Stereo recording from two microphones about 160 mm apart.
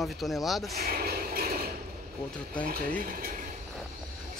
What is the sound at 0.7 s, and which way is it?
Vehicle, 75° right (ahead or behind).